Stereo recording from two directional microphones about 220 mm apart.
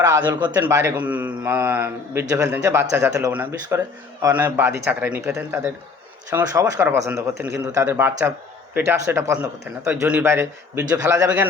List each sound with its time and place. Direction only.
0.0 s a man's voice: 20° right (ahead or behind)